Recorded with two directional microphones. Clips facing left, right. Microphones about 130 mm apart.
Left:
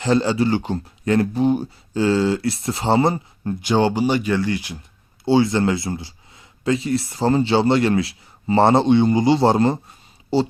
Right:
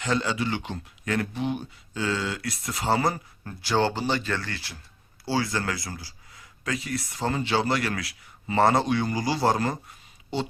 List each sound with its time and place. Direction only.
0.0 s speech: 30° left (ahead or behind)